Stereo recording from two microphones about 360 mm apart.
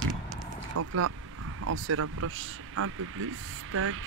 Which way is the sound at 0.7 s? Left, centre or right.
Right.